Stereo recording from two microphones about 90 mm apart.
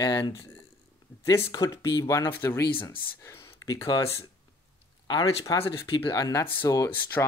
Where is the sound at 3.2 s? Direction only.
40° left (ahead or behind).